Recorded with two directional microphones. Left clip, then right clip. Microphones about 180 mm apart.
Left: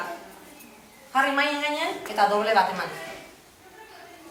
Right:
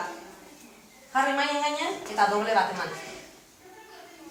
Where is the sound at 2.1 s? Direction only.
5° left (ahead or behind).